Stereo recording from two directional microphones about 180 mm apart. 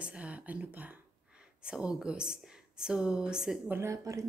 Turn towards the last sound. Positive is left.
turn(degrees=-15)  # may be behind; listen again after turning